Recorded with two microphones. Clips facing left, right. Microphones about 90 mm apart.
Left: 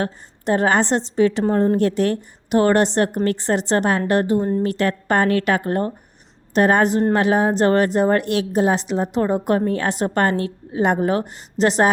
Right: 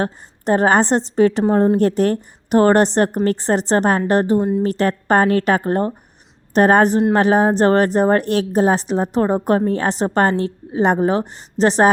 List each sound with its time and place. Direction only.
0.0 s a woman's voice: 35° right (ahead or behind)